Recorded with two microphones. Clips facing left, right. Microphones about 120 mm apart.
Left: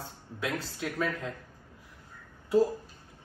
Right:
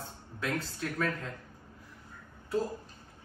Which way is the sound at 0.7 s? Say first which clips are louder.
Left 1 dB; 10° left (ahead or behind).